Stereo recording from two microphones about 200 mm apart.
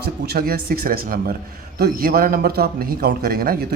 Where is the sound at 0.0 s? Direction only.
50° right (ahead or behind).